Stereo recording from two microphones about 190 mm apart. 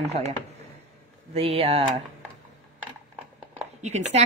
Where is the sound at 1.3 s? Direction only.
30° right (ahead or behind).